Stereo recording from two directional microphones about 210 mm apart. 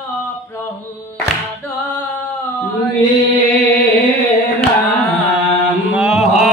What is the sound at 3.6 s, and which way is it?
Music, 10° left (ahead or behind).